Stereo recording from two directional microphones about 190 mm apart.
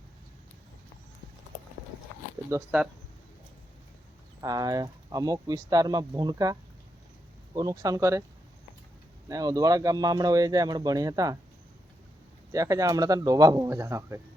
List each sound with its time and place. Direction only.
2.5 s speech: 15° right (ahead or behind)
4.4 s speech: 20° right (ahead or behind)
9.3 s speech: 20° right (ahead or behind)
12.5 s speech: 20° right (ahead or behind)